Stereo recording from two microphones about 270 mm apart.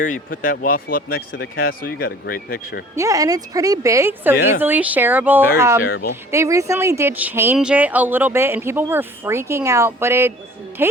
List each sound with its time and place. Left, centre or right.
0.0 s speech: left
2.9 s speech: centre